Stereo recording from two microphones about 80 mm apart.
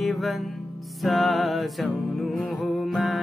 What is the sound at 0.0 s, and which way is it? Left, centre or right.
Music, centre.